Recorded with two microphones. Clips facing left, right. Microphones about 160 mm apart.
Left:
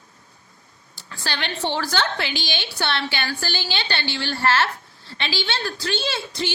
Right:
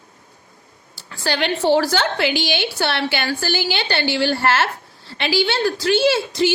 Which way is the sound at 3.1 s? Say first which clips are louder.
Right 6 dB; 40° right (ahead or behind).